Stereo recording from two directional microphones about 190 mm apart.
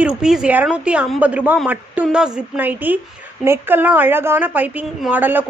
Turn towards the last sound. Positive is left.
turn(degrees=-10)  # may be behind; listen again after turning